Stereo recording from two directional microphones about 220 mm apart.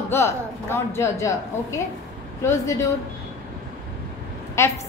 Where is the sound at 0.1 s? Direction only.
10° left (ahead or behind).